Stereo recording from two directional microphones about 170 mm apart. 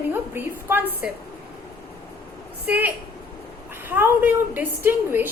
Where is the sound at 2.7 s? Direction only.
10° right (ahead or behind).